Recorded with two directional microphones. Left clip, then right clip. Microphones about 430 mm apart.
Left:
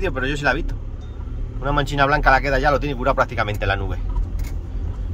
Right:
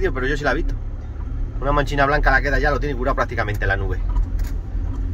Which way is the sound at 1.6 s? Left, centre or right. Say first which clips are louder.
Right 1 dB; centre.